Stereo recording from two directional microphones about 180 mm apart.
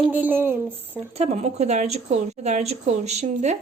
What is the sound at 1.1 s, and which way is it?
A woman's voice, 35° right (ahead or behind).